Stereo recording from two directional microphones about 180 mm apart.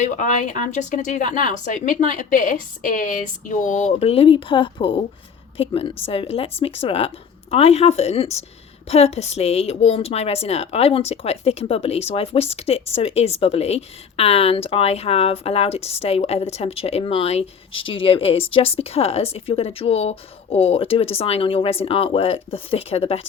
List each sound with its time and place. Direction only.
0.0 s a woman's voice: 45° left (ahead or behind)